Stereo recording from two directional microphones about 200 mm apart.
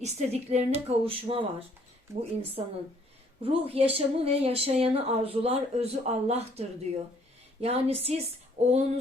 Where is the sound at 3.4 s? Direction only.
30° right (ahead or behind).